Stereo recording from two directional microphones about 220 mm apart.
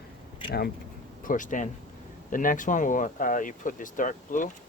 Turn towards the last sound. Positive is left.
turn(degrees=35)  # may be behind; listen again after turning